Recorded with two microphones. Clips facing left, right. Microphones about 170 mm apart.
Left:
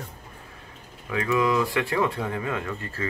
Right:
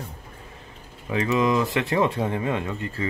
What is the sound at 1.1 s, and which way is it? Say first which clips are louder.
Speech: right 2 dB; 20° right (ahead or behind).